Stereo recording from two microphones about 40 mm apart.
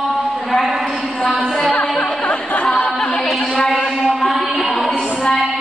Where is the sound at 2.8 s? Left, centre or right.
Left.